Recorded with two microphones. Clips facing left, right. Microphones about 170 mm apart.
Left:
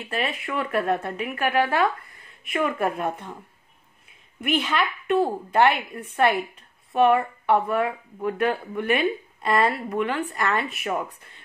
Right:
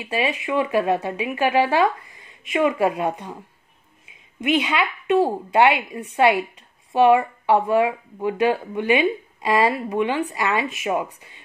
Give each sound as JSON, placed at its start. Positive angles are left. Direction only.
{"t": 0.0, "sound": "speech", "side_deg": -15}
{"t": 4.4, "sound": "speech", "side_deg": -15}